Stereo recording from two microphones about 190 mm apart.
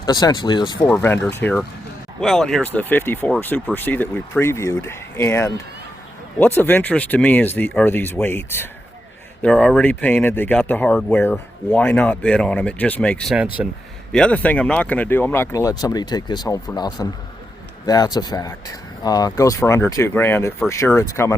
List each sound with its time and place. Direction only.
0.0 s speech: 20° left (ahead or behind)
0.9 s speech: 10° left (ahead or behind)
13.6 s a man's voice: 10° right (ahead or behind)
14.1 s speech: 5° left (ahead or behind)